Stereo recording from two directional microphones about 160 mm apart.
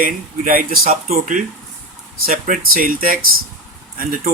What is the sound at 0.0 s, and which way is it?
Speech, 60° right (ahead or behind).